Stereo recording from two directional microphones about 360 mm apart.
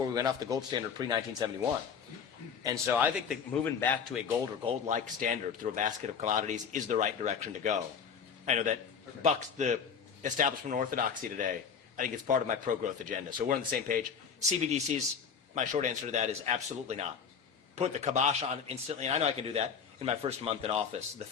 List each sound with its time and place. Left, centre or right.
0.1 s a man's voice: centre
2.6 s a man's voice: centre
4.6 s a man's voice: centre